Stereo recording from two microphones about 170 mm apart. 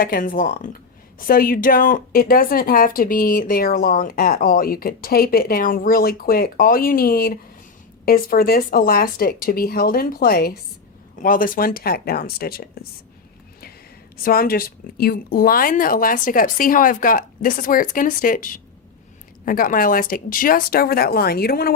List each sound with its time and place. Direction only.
0.0 s a woman's voice: 55° left (ahead or behind)
14.2 s a woman's voice: 60° left (ahead or behind)